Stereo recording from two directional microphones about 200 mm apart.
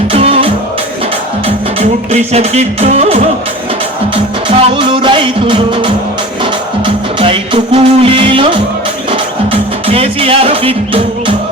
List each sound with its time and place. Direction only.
0.1 s music: 30° right (ahead or behind)